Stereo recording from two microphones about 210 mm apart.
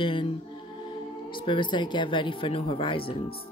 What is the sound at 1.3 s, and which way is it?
Speech, 25° left (ahead or behind).